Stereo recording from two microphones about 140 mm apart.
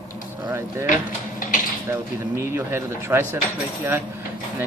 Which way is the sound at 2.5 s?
20° right (ahead or behind).